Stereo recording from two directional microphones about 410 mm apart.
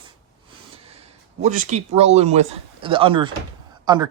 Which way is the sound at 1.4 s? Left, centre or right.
Centre.